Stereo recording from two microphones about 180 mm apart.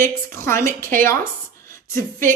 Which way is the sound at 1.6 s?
15° left (ahead or behind).